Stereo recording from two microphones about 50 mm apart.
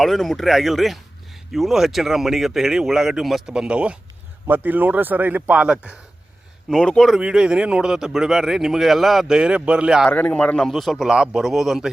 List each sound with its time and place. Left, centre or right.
0.0 s speech: centre
4.4 s speech: right
6.7 s speech: centre
7.2 s speech: centre
9.2 s speech: centre
10.1 s a man's voice: left
10.7 s speech: centre
10.9 s speech: centre
11.3 s speech: centre